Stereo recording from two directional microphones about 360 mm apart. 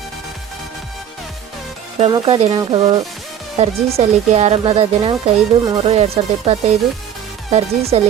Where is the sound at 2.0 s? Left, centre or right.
Centre.